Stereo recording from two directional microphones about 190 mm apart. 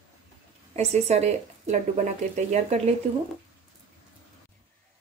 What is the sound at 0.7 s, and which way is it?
Speech, 35° right (ahead or behind).